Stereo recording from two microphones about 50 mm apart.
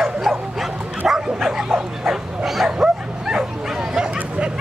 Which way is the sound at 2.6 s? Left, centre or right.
Centre.